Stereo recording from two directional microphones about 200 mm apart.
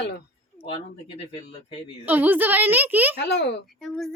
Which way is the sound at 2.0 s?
10° right (ahead or behind).